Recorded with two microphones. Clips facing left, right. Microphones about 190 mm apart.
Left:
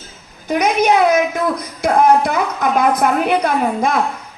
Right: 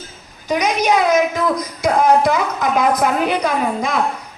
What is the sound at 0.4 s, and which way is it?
A woman's voice, 55° left (ahead or behind).